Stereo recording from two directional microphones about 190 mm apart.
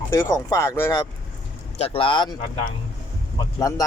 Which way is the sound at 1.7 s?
30° left (ahead or behind).